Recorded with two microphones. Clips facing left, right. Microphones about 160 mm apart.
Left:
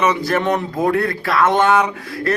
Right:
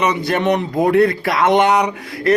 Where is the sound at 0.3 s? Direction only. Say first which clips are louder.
Right 2 dB; 20° right (ahead or behind).